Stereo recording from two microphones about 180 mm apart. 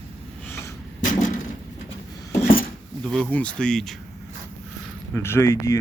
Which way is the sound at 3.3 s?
5° left (ahead or behind).